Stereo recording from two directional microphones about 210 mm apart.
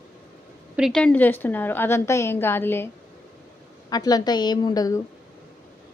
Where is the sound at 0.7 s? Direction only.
Centre (ahead or behind).